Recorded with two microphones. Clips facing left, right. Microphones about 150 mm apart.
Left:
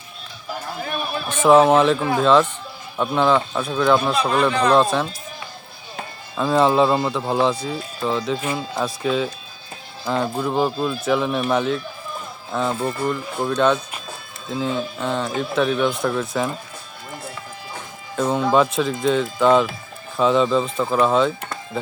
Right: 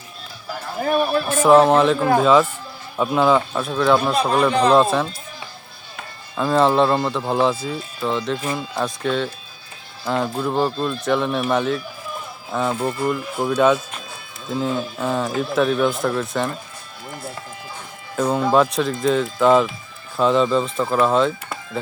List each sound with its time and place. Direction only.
0.8 s a man's voice: 45° right (ahead or behind)
1.4 s speech: centre (ahead or behind)
6.3 s speech: centre (ahead or behind)
18.2 s speech: centre (ahead or behind)